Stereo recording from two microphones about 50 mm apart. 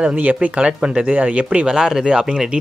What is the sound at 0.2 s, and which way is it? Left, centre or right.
Speech, right.